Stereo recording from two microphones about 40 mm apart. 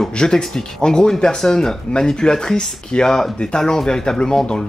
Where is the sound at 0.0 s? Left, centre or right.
Centre.